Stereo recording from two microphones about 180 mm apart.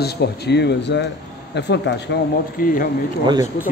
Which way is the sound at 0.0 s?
65° left (ahead or behind).